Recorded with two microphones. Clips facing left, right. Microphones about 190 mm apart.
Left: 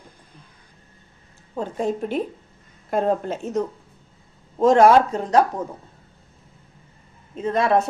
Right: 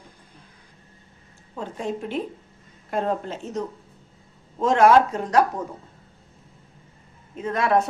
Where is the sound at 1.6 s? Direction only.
40° left (ahead or behind).